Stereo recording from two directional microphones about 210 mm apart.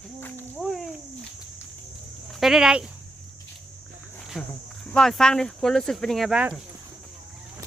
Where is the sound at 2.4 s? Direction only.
Centre (ahead or behind).